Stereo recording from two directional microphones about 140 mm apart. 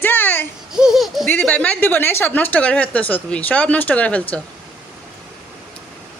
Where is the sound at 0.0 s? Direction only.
15° left (ahead or behind).